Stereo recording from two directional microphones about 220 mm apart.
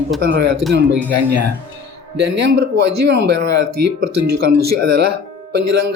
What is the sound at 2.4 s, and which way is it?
Speech, 50° right (ahead or behind).